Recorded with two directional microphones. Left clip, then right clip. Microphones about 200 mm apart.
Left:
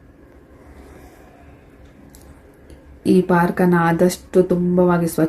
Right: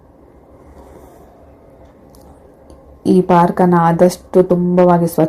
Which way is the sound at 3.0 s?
5° right (ahead or behind).